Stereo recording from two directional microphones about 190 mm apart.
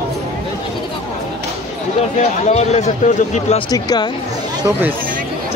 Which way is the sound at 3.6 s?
20° left (ahead or behind).